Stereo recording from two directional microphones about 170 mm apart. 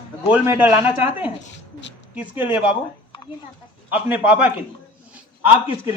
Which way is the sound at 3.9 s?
10° right (ahead or behind).